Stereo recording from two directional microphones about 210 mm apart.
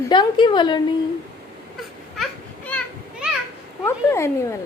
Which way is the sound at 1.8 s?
Centre (ahead or behind).